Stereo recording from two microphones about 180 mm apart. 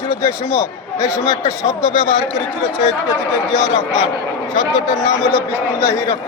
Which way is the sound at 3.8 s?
25° left (ahead or behind).